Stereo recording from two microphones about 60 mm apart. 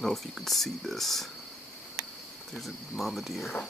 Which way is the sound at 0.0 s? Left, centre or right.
Centre.